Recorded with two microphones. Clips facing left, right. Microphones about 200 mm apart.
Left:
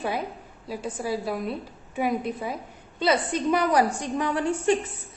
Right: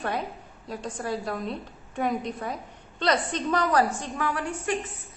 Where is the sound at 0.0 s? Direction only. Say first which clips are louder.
Left 1 dB; 5° left (ahead or behind); by 4.7 s 25° left (ahead or behind).